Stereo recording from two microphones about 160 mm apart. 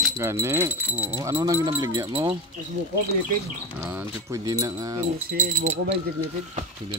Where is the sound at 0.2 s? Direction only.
15° right (ahead or behind).